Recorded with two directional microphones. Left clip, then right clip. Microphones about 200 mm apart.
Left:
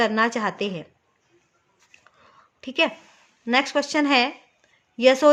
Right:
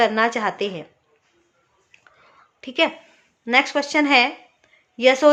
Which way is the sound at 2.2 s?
20° left (ahead or behind).